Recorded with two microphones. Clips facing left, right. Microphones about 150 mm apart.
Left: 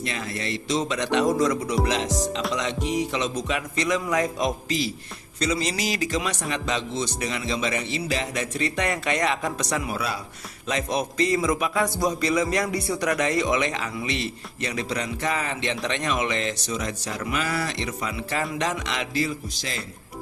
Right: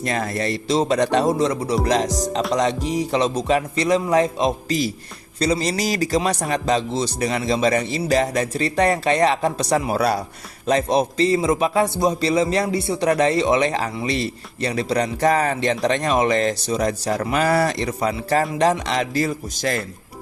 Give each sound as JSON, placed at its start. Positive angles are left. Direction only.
{"t": 0.0, "sound": "a man's voice", "side_deg": -45}